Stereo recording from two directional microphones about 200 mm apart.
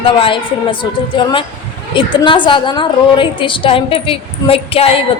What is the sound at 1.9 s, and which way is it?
A woman's voice, 25° left (ahead or behind).